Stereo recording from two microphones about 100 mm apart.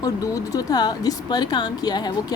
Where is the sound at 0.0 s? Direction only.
40° left (ahead or behind).